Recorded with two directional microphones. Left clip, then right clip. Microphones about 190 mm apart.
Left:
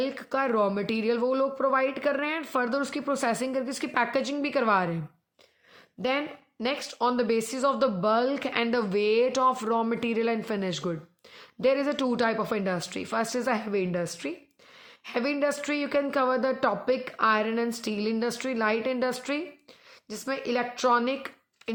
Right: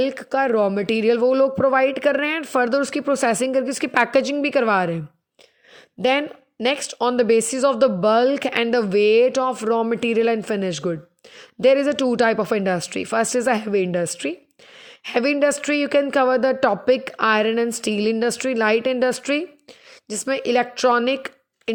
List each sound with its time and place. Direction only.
0.0 s speech: 35° right (ahead or behind)
6.0 s speech: 40° right (ahead or behind)